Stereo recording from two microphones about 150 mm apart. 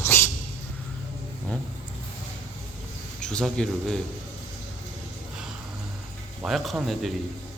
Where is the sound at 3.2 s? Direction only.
5° left (ahead or behind).